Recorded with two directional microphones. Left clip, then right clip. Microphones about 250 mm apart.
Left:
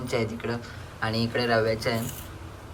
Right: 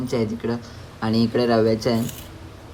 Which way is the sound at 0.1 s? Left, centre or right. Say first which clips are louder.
Right 3 dB; centre.